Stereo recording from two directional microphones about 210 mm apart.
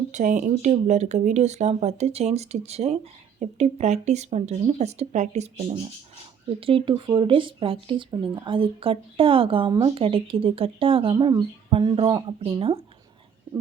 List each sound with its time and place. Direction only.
0.1 s speech: 35° right (ahead or behind)